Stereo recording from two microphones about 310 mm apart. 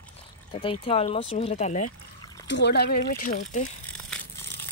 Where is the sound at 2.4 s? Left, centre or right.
Left.